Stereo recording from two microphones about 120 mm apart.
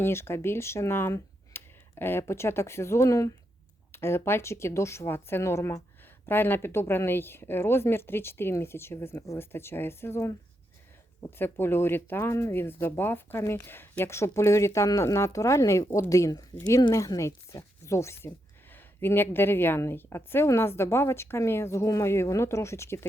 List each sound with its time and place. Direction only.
0.0 s a woman's voice: 20° left (ahead or behind)